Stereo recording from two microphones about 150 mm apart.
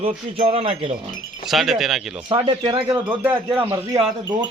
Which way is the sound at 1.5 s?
Centre (ahead or behind).